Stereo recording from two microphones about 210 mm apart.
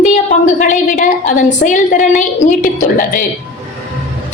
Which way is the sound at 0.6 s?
40° left (ahead or behind).